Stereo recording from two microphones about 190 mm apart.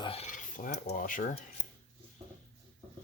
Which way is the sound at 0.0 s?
30° left (ahead or behind).